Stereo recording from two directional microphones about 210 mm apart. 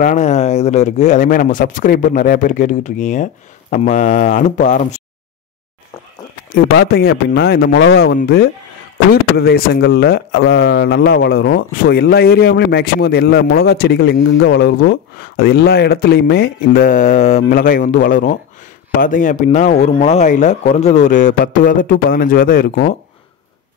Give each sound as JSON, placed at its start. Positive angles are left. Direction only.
{"t": 0.0, "sound": "speech", "side_deg": 35}
{"t": 6.8, "sound": "speech", "side_deg": 50}
{"t": 15.1, "sound": "speech", "side_deg": 50}